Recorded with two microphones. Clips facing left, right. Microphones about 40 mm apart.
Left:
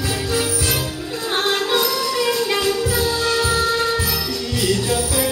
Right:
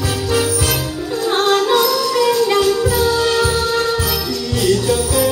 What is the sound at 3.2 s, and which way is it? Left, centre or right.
Music, right.